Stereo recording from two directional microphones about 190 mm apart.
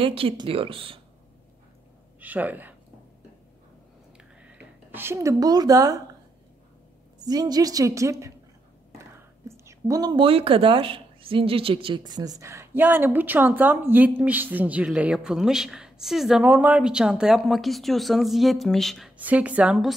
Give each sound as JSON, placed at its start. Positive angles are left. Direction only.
{"t": 0.0, "sound": "a woman's voice", "side_deg": -30}
{"t": 2.1, "sound": "speech", "side_deg": -10}
{"t": 4.2, "sound": "a sound", "side_deg": -5}
{"t": 7.2, "sound": "a woman's voice", "side_deg": -20}